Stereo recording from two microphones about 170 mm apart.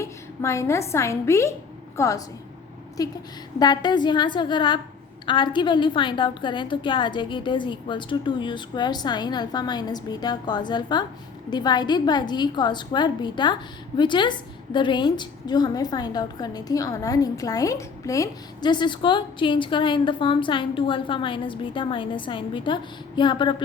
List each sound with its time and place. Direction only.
0.0 s a woman's voice: 15° left (ahead or behind)